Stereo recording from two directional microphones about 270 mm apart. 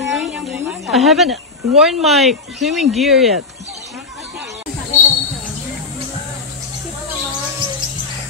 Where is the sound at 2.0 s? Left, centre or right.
Centre.